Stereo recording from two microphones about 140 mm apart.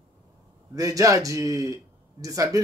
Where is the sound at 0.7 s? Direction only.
25° right (ahead or behind).